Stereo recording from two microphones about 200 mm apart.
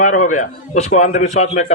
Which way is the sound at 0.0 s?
40° left (ahead or behind).